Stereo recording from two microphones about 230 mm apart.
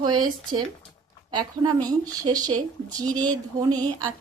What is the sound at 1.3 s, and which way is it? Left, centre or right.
Speech, centre.